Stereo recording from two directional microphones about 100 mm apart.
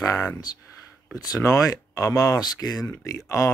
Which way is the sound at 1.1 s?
35° left (ahead or behind).